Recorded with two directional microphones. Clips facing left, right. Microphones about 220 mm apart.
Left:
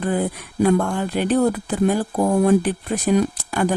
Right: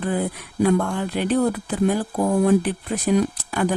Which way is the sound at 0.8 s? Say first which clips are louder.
Left 2 dB; 45° left (ahead or behind).